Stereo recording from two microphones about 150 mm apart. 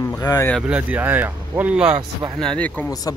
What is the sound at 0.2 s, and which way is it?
Speech, 25° left (ahead or behind).